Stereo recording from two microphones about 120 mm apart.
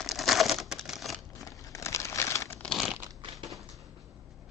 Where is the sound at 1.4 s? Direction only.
25° left (ahead or behind).